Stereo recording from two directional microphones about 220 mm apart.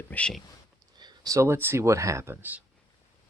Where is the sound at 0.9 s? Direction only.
20° right (ahead or behind).